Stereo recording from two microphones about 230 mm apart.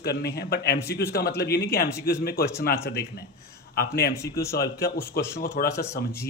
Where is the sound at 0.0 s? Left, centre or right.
Left.